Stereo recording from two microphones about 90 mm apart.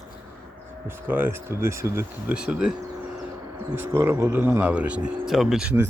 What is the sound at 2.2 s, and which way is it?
Speech, 10° right (ahead or behind).